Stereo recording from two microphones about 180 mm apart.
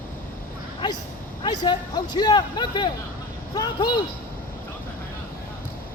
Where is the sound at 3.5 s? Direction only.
25° left (ahead or behind).